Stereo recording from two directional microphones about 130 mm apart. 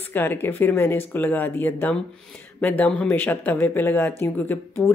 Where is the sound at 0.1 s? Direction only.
15° left (ahead or behind).